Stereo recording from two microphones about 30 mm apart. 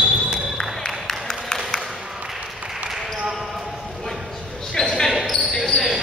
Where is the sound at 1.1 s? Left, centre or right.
Centre.